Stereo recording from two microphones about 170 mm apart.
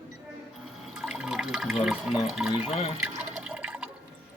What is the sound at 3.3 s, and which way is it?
Water, 5° right (ahead or behind).